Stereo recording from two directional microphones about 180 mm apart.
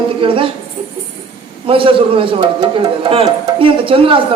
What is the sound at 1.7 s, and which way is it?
A man's voice, 30° right (ahead or behind).